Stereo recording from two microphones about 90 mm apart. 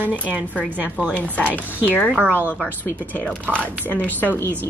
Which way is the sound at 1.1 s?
15° left (ahead or behind).